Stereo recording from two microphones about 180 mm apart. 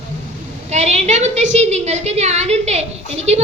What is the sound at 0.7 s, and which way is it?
A woman's voice, 40° right (ahead or behind).